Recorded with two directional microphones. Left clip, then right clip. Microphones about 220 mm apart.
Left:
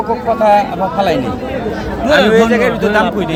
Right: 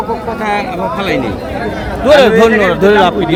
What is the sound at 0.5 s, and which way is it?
Speech, 25° left (ahead or behind).